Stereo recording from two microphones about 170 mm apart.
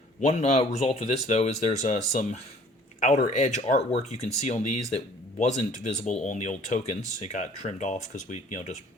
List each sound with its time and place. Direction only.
0.2 s speech: 45° left (ahead or behind)